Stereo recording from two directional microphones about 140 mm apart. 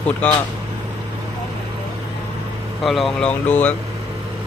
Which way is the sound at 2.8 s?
Centre (ahead or behind).